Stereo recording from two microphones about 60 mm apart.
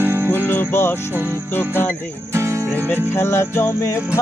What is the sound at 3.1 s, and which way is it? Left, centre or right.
Music, left.